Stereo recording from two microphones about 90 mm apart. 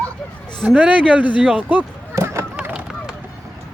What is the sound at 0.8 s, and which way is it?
Speech, 15° right (ahead or behind).